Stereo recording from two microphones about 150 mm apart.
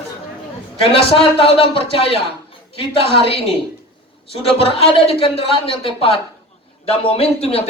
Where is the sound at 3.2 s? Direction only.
40° left (ahead or behind).